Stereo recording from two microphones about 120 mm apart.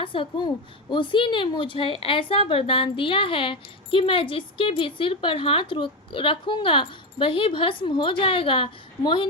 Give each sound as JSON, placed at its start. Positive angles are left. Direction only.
{"t": 0.0, "sound": "a woman's voice", "side_deg": 45}